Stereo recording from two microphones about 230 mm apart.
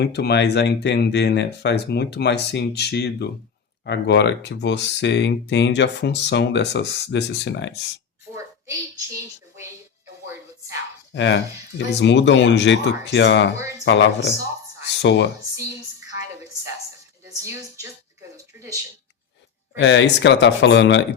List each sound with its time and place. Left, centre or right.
0.0 s speech: left
8.7 s a woman's voice: centre
11.1 s speech: left
19.8 s speech: left